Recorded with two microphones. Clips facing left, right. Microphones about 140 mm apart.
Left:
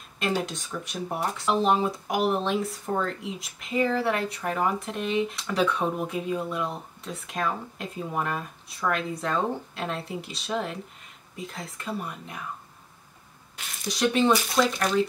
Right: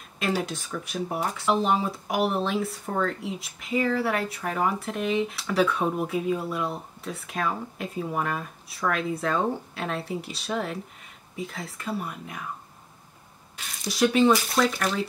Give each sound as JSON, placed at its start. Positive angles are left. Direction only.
{"t": 0.2, "sound": "speech", "side_deg": -5}
{"t": 13.8, "sound": "speech", "side_deg": -5}